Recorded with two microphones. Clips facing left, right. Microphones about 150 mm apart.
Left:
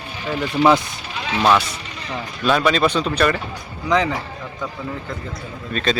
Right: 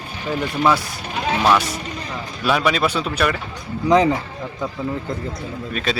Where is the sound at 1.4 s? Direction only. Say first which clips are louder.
Left 2 dB; 5° right (ahead or behind).